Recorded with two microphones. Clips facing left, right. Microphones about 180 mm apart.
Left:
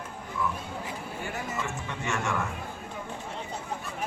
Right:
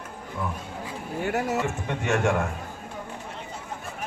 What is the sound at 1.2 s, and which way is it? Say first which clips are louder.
Speech: right 9 dB; 70° right (ahead or behind).